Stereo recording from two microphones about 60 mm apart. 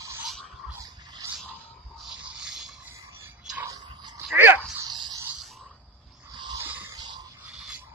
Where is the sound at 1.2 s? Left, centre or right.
Right.